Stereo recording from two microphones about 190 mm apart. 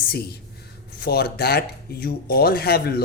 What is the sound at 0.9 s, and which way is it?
Speech, 55° left (ahead or behind).